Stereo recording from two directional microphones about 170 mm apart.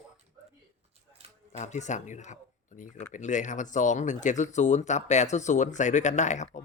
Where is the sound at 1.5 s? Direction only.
45° left (ahead or behind).